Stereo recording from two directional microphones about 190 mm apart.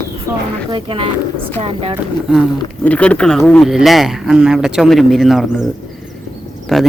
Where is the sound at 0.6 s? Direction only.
25° right (ahead or behind).